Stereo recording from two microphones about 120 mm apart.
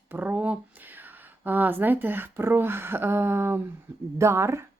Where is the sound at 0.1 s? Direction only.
15° right (ahead or behind).